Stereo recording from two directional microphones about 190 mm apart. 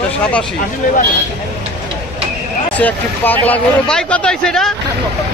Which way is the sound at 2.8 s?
10° left (ahead or behind).